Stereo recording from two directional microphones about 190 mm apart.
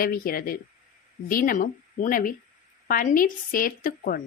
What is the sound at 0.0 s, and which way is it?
A woman's voice, 50° left (ahead or behind).